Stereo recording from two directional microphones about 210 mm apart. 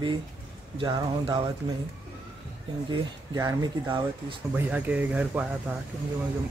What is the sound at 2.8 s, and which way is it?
Speech, 15° right (ahead or behind).